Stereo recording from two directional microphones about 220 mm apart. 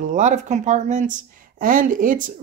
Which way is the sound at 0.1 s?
35° right (ahead or behind).